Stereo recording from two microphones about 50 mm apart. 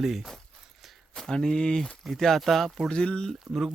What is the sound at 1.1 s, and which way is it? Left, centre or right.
Speech, centre.